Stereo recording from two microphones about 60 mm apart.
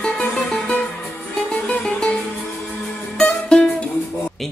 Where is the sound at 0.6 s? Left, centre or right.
Left.